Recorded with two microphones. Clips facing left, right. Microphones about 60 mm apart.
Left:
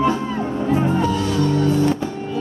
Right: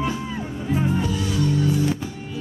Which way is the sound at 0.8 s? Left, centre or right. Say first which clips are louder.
Left 5 dB; left.